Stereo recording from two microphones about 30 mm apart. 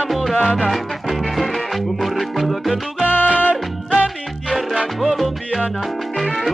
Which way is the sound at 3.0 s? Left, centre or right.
Left.